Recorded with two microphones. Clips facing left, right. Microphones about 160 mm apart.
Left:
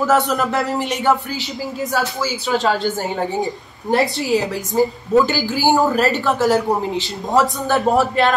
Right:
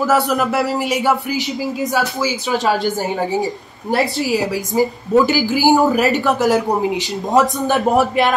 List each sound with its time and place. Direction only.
0.0 s speech: centre (ahead or behind)
3.9 s speech: centre (ahead or behind)
5.2 s speech: 15° right (ahead or behind)